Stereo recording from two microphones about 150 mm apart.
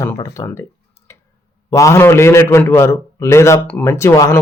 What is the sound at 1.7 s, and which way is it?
A man's voice, 20° left (ahead or behind).